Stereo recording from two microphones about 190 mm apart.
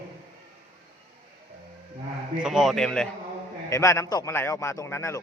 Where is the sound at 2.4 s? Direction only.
Centre (ahead or behind).